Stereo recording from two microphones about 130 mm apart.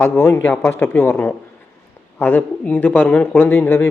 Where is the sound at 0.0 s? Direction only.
15° left (ahead or behind).